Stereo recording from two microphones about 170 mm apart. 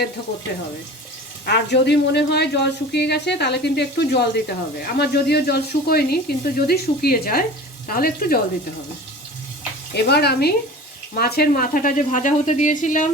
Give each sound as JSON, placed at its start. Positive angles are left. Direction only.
{"t": 1.5, "sound": "speech", "side_deg": 80}
{"t": 9.9, "sound": "speech", "side_deg": 70}